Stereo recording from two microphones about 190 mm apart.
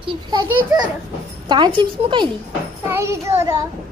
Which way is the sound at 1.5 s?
25° right (ahead or behind).